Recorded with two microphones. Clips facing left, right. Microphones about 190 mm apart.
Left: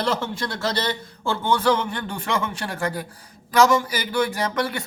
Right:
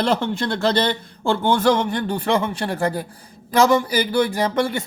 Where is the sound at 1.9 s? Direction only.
35° right (ahead or behind).